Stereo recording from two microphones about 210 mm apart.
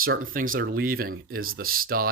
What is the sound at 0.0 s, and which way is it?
Speech, 40° right (ahead or behind).